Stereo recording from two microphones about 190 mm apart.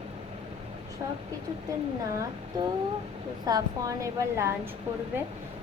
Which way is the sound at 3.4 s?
20° right (ahead or behind).